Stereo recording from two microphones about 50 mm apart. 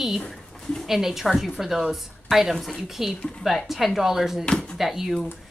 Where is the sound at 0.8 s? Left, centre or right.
Centre.